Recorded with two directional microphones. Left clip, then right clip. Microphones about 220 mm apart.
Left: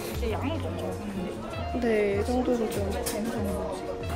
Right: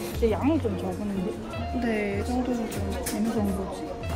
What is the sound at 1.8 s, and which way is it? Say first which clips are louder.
Speech: left 4 dB; centre (ahead or behind).